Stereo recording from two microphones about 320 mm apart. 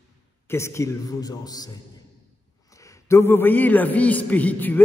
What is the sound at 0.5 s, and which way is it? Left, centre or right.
A man's voice, centre.